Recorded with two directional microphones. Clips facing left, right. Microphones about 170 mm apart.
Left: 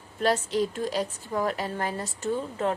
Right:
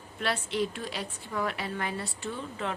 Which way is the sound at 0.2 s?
40° left (ahead or behind).